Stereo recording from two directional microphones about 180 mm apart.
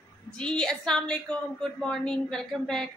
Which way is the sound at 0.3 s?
5° left (ahead or behind).